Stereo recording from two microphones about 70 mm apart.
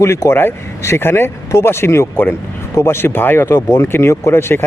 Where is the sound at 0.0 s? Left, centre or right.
Left.